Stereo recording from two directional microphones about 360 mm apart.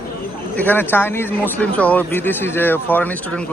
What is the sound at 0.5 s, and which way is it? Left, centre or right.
Speech, centre.